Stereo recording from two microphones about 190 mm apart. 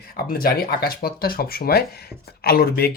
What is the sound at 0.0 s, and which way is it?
Speech, 50° left (ahead or behind).